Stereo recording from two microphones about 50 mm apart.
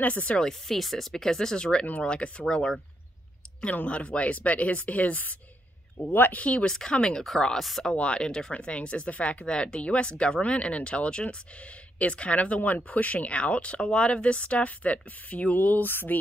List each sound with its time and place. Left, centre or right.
0.0 s speech: left
0.4 s speech: centre
3.6 s speech: left
6.1 s speech: left
6.4 s speech: left; by 7.8 s centre
7.8 s speech: left